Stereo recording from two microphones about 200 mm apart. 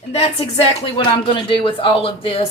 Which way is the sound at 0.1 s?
30° left (ahead or behind).